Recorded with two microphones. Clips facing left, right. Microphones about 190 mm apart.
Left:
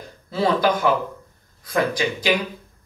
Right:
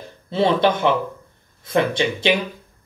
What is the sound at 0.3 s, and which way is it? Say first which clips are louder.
Speech: right 2 dB; 25° right (ahead or behind).